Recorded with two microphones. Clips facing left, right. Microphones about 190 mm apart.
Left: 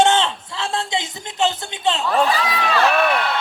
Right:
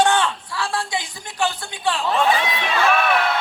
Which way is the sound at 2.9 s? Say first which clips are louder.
Left 1 dB; 40° left (ahead or behind).